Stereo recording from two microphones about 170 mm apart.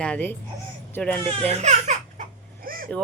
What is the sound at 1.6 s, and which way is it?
Baby laughter, 45° right (ahead or behind).